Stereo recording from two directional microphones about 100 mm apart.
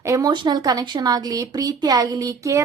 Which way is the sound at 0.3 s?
45° right (ahead or behind).